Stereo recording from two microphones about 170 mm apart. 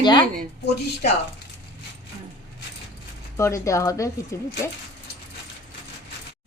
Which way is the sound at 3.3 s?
15° left (ahead or behind).